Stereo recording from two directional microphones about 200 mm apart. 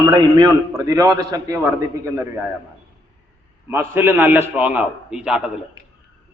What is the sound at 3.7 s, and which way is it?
A man's voice, 10° right (ahead or behind).